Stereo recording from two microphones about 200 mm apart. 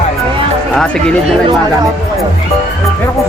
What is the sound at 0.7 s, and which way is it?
Speech, 5° left (ahead or behind).